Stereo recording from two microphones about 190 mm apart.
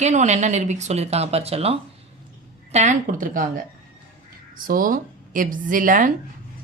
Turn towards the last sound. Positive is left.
turn(degrees=-45)  # may be behind; listen again after turning